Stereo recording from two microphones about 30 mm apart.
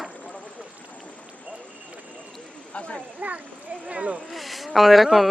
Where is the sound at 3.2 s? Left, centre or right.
Right.